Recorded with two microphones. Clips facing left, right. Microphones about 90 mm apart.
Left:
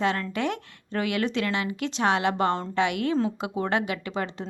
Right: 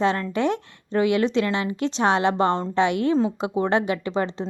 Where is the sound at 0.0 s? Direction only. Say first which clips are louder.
Right 4 dB; 25° right (ahead or behind).